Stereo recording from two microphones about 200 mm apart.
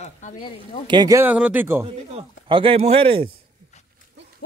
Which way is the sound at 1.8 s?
25° right (ahead or behind).